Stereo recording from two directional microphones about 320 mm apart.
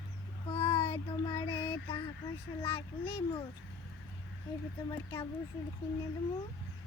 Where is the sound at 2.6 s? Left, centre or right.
Centre.